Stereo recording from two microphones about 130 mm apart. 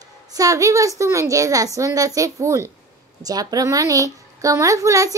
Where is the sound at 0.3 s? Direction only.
25° right (ahead or behind).